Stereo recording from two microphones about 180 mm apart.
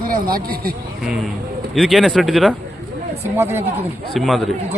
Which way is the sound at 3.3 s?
15° right (ahead or behind).